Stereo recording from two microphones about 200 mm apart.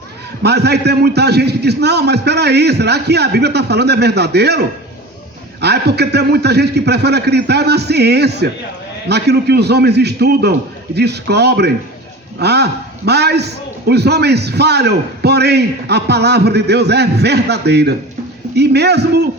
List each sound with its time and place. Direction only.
0.4 s a man's voice: 55° right (ahead or behind)